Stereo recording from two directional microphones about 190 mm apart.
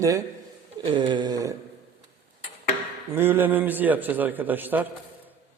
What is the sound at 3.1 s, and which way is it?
A man's voice, 10° right (ahead or behind).